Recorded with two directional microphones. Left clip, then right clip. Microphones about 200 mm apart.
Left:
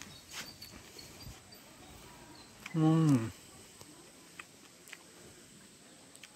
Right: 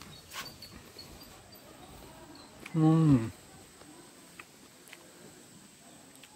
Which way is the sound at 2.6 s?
Centre (ahead or behind).